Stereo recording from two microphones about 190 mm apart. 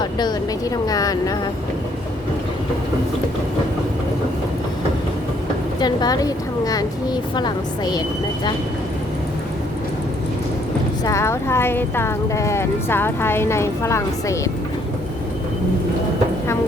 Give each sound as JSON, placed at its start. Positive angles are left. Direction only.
{"t": 0.0, "sound": "a sound", "side_deg": 20}
{"t": 0.9, "sound": "a woman's voice", "side_deg": 20}
{"t": 5.8, "sound": "a woman's voice", "side_deg": 20}
{"t": 11.0, "sound": "speech", "side_deg": 15}